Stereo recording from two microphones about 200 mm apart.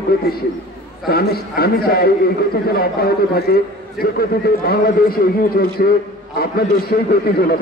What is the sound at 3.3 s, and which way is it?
A man's voice, 50° left (ahead or behind).